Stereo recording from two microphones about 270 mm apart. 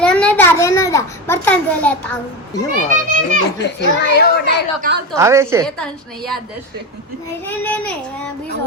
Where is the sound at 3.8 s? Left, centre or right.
Left.